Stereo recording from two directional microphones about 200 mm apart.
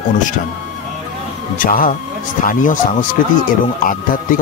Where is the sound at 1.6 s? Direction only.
45° left (ahead or behind).